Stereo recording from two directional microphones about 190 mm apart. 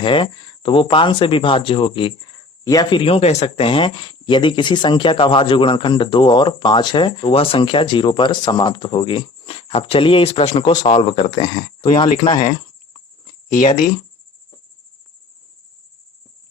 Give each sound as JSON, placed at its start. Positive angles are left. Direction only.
{"t": 0.0, "sound": "speech", "side_deg": 25}
{"t": 13.5, "sound": "speech", "side_deg": 45}